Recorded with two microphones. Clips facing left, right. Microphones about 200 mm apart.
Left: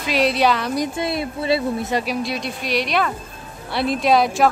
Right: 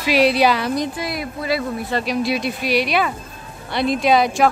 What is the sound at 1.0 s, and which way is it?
Speech, 25° left (ahead or behind).